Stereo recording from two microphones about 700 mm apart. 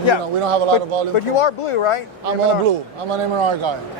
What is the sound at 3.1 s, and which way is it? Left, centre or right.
Speech, right.